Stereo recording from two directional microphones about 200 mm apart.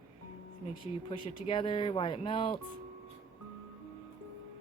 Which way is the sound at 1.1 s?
25° left (ahead or behind).